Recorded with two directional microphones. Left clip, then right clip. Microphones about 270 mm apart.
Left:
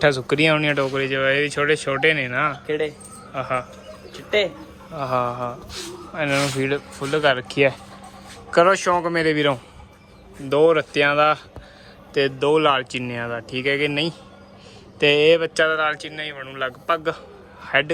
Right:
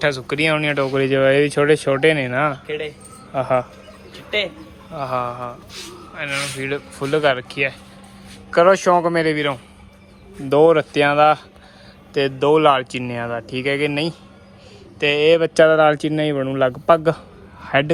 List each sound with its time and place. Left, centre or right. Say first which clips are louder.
0.0 s speech: left 1 dB; centre
2.6 s speech: left 2 dB; left
3.3 s speech: right 6 dB; centre
4.1 s speech: left 1 dB; left
4.9 s speech: even; centre
8.5 s speech: right 3 dB; centre
17.6 s a sound: right 2 dB; centre